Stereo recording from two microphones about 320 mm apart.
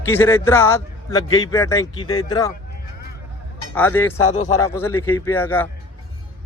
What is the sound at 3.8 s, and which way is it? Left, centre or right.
A man's voice, centre.